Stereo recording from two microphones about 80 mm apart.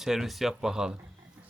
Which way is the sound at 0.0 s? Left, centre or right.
Centre.